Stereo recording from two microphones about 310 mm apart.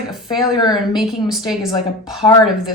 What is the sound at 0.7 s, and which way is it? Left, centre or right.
A woman's voice, centre.